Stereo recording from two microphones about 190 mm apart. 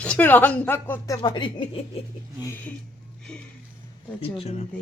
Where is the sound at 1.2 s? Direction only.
25° left (ahead or behind).